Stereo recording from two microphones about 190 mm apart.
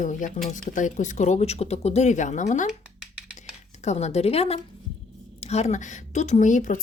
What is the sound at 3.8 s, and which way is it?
A woman's voice, 35° left (ahead or behind).